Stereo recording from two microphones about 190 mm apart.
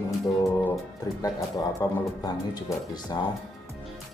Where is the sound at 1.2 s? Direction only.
20° left (ahead or behind).